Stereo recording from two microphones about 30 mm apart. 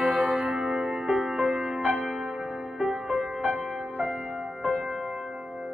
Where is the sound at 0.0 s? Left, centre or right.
Right.